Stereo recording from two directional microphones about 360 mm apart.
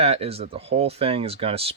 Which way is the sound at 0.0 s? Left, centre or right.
Centre.